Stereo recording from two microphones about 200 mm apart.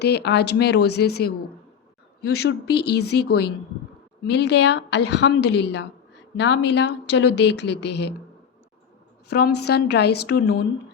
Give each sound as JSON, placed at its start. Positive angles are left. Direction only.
{"t": 0.0, "sound": "a woman's voice", "side_deg": 55}
{"t": 9.3, "sound": "a woman's voice", "side_deg": 55}